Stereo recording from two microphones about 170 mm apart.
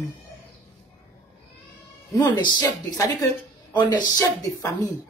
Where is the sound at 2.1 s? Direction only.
25° left (ahead or behind).